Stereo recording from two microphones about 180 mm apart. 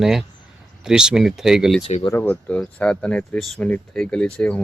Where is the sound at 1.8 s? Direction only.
25° left (ahead or behind).